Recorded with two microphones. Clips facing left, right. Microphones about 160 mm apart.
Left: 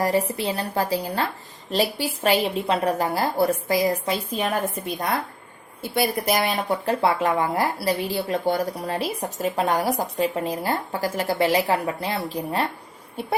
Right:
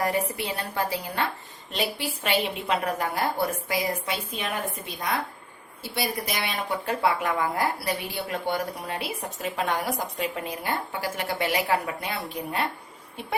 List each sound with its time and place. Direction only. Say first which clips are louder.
0.0 s speech: left 4 dB; 35° left (ahead or behind)
5.8 s a woman's voice: left 7 dB; 50° left (ahead or behind)
6.8 s speech: left 3 dB; 35° left (ahead or behind)